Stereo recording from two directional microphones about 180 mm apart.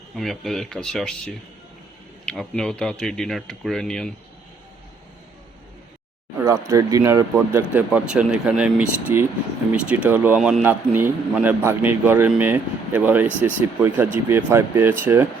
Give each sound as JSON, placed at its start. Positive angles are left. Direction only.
{"t": 0.2, "sound": "speech", "side_deg": 0}
{"t": 6.4, "sound": "a man's voice", "side_deg": -15}